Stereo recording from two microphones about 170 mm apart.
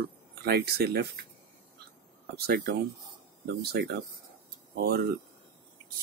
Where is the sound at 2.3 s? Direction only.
65° right (ahead or behind).